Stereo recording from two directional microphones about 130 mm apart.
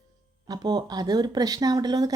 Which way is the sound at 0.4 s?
30° right (ahead or behind).